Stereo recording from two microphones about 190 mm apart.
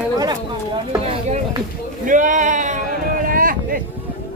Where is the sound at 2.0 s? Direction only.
45° right (ahead or behind).